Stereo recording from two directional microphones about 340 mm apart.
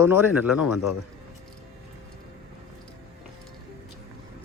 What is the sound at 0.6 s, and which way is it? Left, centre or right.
Speech, left.